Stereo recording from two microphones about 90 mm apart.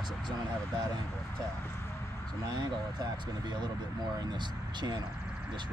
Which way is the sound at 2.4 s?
50° right (ahead or behind).